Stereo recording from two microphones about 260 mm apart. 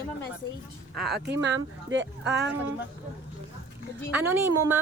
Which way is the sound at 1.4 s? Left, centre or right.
Right.